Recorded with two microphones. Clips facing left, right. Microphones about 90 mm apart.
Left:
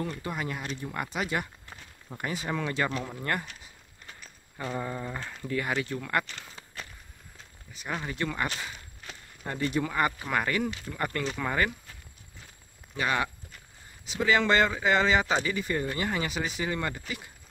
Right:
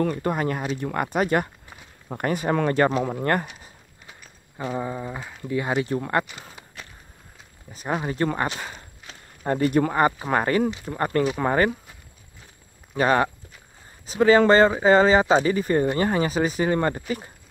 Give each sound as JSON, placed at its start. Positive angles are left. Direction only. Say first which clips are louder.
{"t": 0.0, "sound": "speech", "louder": "right 10 dB", "side_deg": -50}
{"t": 4.1, "sound": "speech", "louder": "right 1 dB", "side_deg": -10}
{"t": 5.6, "sound": "speech", "louder": "right 7 dB", "side_deg": -30}
{"t": 6.5, "sound": "walk", "louder": "right 1 dB", "side_deg": -5}
{"t": 7.7, "sound": "speech", "louder": "right 8 dB", "side_deg": -40}
{"t": 12.9, "sound": "speech", "louder": "right 9 dB", "side_deg": -40}